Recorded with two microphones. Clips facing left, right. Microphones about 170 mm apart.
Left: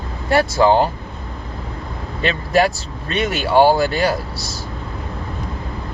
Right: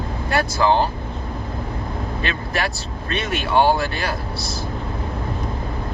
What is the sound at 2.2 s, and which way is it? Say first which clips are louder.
Speech: left 11 dB; 30° left (ahead or behind).